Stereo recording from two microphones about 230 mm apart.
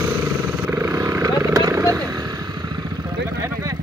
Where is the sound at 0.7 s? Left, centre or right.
Centre.